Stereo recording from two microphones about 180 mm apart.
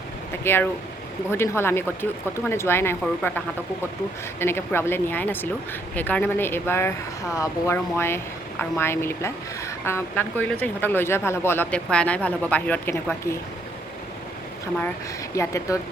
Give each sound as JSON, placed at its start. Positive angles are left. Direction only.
{"t": 0.4, "sound": "speech", "side_deg": 10}
{"t": 15.4, "sound": "speech", "side_deg": 15}